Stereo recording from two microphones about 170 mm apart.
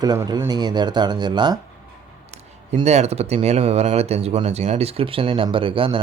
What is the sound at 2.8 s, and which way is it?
Speech, 40° right (ahead or behind).